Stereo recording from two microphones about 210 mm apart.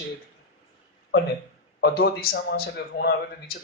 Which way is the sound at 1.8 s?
50° left (ahead or behind).